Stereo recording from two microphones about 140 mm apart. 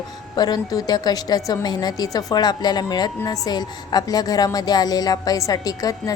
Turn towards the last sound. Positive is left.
turn(degrees=25)  # may be behind; listen again after turning